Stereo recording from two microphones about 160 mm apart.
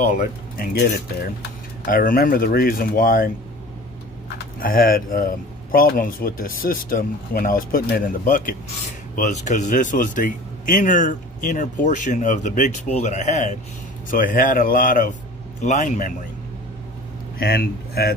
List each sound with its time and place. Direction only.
0.0 s speech: 60° left (ahead or behind)
4.6 s speech: 60° left (ahead or behind)
9.1 s speech: 50° left (ahead or behind)
14.1 s speech: 60° left (ahead or behind)
17.4 s speech: 75° left (ahead or behind)